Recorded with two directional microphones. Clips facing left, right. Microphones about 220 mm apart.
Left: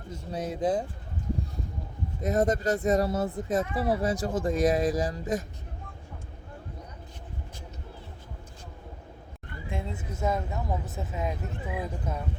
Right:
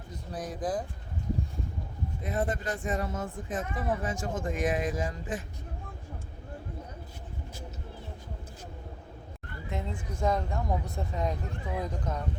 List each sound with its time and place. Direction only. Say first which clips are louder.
0.3 s speech: left 5 dB; 25° left (ahead or behind)
2.2 s speech: left 7 dB; 40° left (ahead or behind)
10.1 s speech: right 1 dB; 5° left (ahead or behind)